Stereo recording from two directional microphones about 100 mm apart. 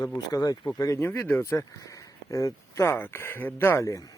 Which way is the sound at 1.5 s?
35° left (ahead or behind).